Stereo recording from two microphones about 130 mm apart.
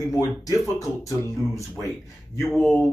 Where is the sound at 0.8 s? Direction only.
25° left (ahead or behind).